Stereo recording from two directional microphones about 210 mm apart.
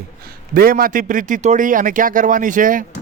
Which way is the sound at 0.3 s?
45° right (ahead or behind).